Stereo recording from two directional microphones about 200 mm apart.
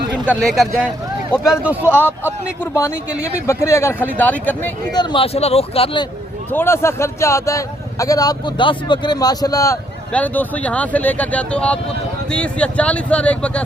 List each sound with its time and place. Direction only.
0.3 s speech: centre (ahead or behind)
2.7 s speech: 15° left (ahead or behind)
4.9 s speech: 25° left (ahead or behind)
6.5 s speech: 10° left (ahead or behind)
10.1 s speech: 5° left (ahead or behind)